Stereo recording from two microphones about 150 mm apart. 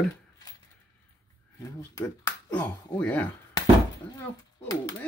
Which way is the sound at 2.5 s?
10° left (ahead or behind).